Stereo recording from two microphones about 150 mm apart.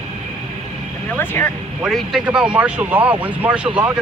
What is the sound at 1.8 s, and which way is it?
Speech, centre (ahead or behind).